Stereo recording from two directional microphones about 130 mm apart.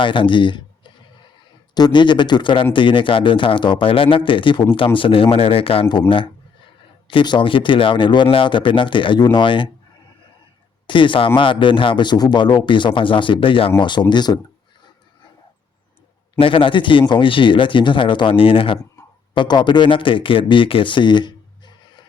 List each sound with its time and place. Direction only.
0.0 s speech: 40° left (ahead or behind)
1.7 s speech: 35° left (ahead or behind)
10.8 s speech: 40° left (ahead or behind)
16.4 s speech: 45° left (ahead or behind)